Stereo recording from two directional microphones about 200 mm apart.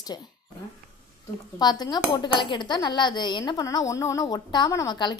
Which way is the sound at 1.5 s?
20° left (ahead or behind).